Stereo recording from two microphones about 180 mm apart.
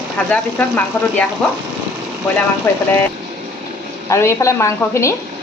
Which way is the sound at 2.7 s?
15° left (ahead or behind).